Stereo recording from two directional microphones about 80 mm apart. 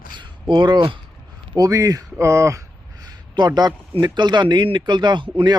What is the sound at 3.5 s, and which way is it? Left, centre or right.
Speech, right.